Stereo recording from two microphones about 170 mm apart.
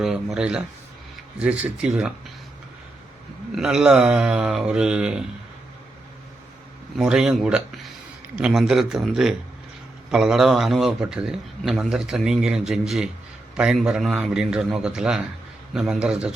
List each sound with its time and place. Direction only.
0.0 s a man's voice: centre (ahead or behind)
3.5 s a man's voice: 5° right (ahead or behind)
6.9 s a man's voice: 5° right (ahead or behind)